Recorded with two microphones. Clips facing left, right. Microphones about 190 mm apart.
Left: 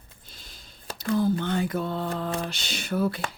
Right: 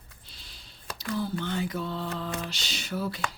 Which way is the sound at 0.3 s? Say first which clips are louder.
Left 4 dB; 45° left (ahead or behind).